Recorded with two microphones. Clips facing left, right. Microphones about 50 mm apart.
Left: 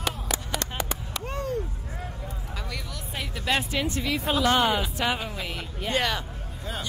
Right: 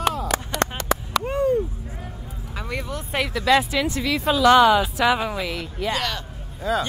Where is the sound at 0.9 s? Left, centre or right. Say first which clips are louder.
Right 11 dB; right.